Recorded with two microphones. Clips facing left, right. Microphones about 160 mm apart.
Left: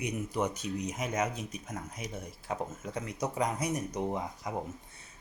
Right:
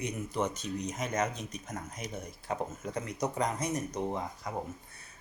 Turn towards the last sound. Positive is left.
turn(degrees=10)  # may be behind; listen again after turning